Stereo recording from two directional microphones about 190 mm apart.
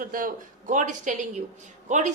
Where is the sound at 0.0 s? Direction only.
45° right (ahead or behind).